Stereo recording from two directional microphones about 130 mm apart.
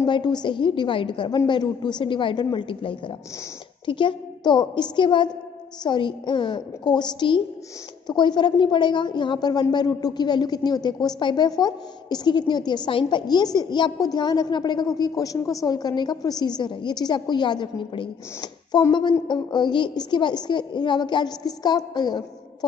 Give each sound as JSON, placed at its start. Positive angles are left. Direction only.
{"t": 0.0, "sound": "a woman's voice", "side_deg": 35}